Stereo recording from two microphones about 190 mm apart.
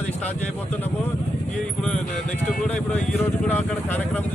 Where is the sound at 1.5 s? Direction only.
5° left (ahead or behind).